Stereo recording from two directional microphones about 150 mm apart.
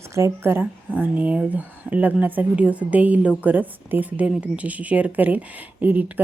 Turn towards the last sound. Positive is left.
turn(degrees=-10)  # may be behind; listen again after turning